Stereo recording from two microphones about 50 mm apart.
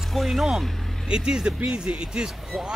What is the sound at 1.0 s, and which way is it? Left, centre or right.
Speech, centre.